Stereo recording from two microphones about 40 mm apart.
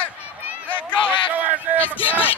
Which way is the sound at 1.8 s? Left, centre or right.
Left.